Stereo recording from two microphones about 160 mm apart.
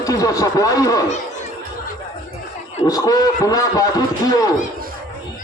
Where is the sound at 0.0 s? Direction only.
20° left (ahead or behind).